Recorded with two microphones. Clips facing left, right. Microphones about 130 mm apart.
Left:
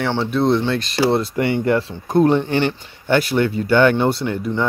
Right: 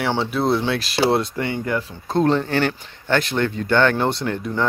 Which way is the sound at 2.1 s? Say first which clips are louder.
Left 3 dB; 10° left (ahead or behind).